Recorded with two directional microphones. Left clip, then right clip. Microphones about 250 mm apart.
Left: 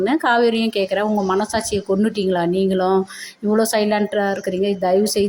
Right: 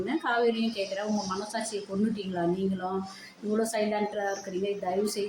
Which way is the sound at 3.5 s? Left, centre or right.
Left.